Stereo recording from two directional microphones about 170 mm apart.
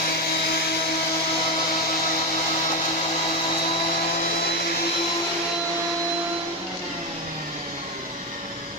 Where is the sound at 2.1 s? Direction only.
55° left (ahead or behind).